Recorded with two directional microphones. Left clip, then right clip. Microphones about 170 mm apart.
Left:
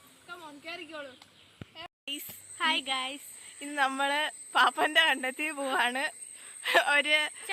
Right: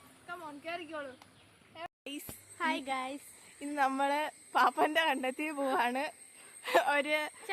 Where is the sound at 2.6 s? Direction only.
15° right (ahead or behind).